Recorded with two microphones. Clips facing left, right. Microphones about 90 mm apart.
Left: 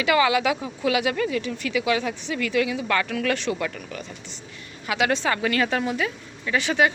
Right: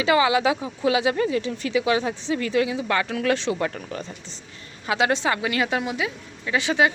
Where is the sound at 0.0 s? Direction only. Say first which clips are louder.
Right 1 dB; 25° right (ahead or behind).